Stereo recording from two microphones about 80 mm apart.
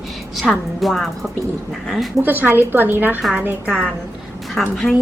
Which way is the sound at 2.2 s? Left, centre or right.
Right.